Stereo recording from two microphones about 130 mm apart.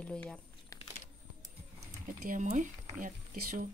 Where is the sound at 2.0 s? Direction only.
90° right.